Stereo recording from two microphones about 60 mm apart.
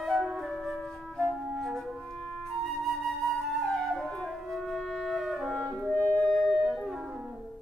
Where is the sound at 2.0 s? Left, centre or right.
Centre.